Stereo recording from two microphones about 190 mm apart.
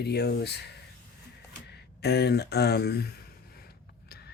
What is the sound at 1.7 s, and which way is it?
Speech, 60° left (ahead or behind).